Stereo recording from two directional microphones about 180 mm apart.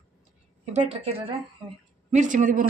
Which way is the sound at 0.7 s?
35° right (ahead or behind).